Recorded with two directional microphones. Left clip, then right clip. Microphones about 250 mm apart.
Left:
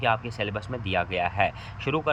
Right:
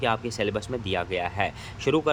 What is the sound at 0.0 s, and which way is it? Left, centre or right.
Speech, centre.